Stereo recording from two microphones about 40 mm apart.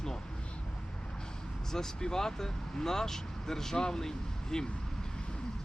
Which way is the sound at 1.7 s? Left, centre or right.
Centre.